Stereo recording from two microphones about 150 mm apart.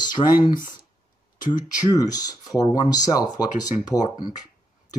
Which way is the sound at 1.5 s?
25° left (ahead or behind).